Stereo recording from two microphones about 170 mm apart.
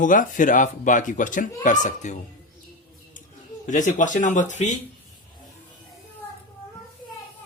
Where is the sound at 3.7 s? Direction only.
45° left (ahead or behind).